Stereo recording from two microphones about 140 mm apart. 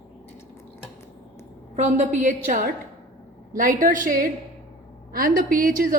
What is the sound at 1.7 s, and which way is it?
Speech, 60° right (ahead or behind).